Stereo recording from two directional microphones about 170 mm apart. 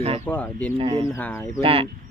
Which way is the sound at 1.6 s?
35° right (ahead or behind).